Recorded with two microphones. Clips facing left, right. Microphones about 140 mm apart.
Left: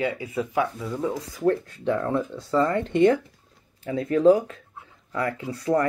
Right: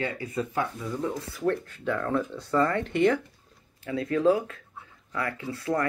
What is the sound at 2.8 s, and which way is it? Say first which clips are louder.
Speech: left 4 dB; 25° left (ahead or behind).